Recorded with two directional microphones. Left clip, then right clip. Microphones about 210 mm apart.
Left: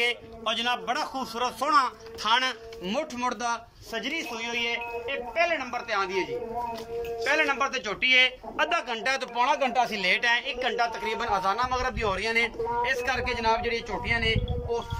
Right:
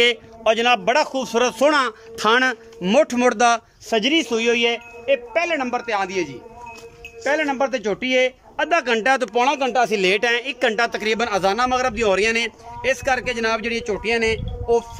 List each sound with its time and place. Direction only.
0.0 s speech: 45° right (ahead or behind)
7.2 s speech: 35° right (ahead or behind); by 14.8 s 55° right (ahead or behind)